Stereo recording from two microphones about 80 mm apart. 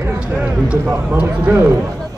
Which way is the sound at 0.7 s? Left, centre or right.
Centre.